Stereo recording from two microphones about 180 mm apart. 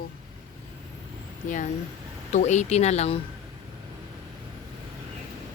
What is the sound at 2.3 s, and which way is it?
Speech, 40° left (ahead or behind).